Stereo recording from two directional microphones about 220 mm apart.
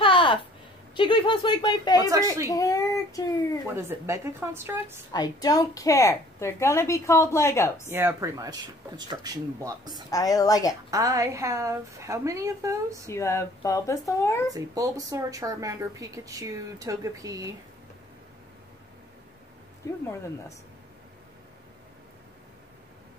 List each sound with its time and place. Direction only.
0.0 s a sound: 25° left (ahead or behind)
0.9 s speech: 20° left (ahead or behind)
2.0 s speech: 15° right (ahead or behind)
2.4 s a child's voice: 15° left (ahead or behind)
3.7 s speech: 10° right (ahead or behind)
5.1 s a woman's voice: 15° left (ahead or behind)
7.9 s speech: 10° right (ahead or behind)
10.1 s a woman's voice: 15° left (ahead or behind)
10.9 s speech: 15° right (ahead or behind)
13.1 s a woman's voice: 15° left (ahead or behind)
14.5 s speech: 15° right (ahead or behind)